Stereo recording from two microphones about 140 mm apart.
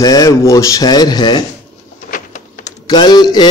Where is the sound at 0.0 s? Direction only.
25° left (ahead or behind).